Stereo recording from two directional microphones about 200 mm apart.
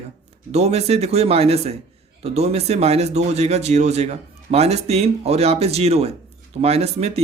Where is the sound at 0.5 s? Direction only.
30° right (ahead or behind).